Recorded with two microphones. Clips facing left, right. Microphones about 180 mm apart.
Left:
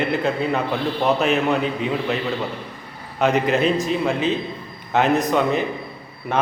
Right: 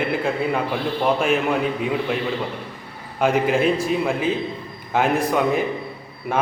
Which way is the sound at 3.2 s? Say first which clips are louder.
Even; 10° right (ahead or behind).